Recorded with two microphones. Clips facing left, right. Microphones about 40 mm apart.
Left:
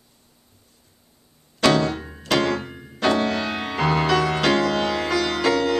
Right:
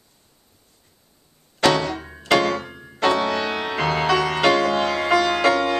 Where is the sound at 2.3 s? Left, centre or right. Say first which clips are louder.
Right 2 dB; right.